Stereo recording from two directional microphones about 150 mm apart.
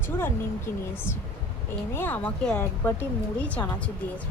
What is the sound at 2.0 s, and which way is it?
A woman's voice, 10° left (ahead or behind).